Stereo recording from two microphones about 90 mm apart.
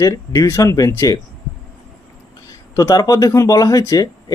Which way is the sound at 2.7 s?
40° left (ahead or behind).